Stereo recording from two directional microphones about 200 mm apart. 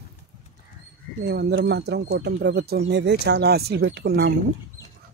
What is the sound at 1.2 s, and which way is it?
Speech, 55° right (ahead or behind).